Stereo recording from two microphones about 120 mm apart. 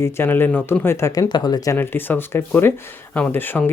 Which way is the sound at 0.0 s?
20° left (ahead or behind).